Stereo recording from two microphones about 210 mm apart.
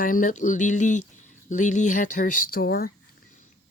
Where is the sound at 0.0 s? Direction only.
40° left (ahead or behind).